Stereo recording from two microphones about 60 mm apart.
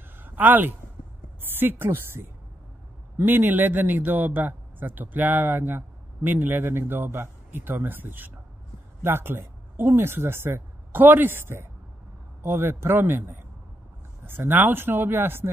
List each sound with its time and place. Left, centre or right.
0.2 s a man's voice: right